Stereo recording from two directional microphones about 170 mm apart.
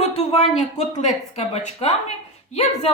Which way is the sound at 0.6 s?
45° left (ahead or behind).